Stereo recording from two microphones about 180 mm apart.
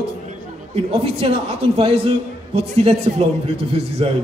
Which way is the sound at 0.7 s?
30° right (ahead or behind).